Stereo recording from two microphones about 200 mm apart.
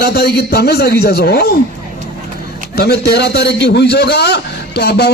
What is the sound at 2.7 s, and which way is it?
A man's voice, 50° left (ahead or behind).